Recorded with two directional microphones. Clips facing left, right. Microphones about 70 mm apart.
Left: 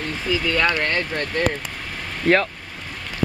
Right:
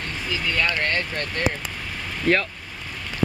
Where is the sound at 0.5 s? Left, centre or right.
Left.